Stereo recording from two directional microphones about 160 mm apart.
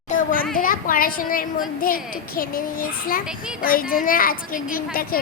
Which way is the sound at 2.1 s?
60° left (ahead or behind).